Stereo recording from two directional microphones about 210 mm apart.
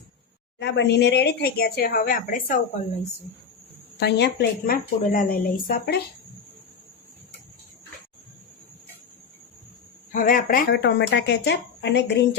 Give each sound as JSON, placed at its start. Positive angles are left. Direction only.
{"t": 0.6, "sound": "a woman's voice", "side_deg": 55}
{"t": 4.0, "sound": "a woman's voice", "side_deg": 50}
{"t": 10.1, "sound": "speech", "side_deg": 40}